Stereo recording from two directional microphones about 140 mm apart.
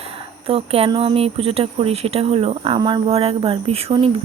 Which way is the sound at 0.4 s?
45° right (ahead or behind).